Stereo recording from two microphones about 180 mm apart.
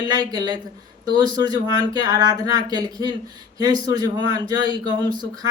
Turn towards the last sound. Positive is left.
turn(degrees=-25)  # may be behind; listen again after turning